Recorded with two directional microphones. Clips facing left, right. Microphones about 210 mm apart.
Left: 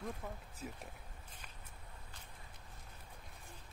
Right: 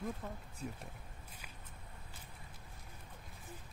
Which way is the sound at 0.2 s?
5° left (ahead or behind).